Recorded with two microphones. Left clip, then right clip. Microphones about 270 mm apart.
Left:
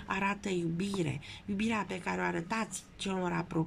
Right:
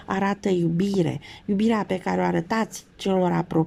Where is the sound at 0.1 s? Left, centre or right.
Right.